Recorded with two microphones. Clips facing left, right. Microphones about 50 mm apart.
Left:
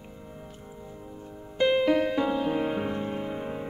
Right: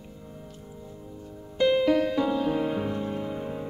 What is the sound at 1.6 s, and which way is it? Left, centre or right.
Music, left.